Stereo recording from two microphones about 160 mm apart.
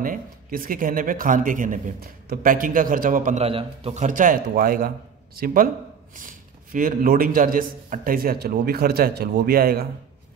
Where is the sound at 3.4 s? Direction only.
40° right (ahead or behind).